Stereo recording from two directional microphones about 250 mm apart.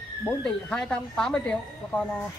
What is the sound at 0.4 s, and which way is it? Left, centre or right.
A man's voice, centre.